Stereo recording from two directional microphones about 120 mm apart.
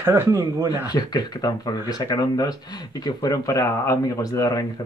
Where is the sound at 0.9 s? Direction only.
35° left (ahead or behind).